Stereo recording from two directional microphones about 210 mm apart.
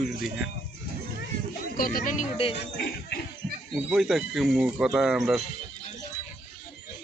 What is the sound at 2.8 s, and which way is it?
Speech, 45° left (ahead or behind).